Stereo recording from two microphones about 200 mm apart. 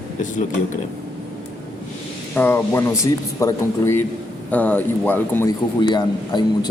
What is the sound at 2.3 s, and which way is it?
A man's voice, 10° left (ahead or behind).